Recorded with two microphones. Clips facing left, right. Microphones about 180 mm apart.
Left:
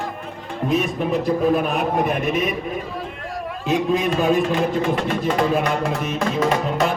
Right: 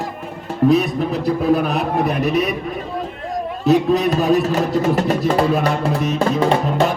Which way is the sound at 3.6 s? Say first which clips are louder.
Right 5 dB; 40° right (ahead or behind).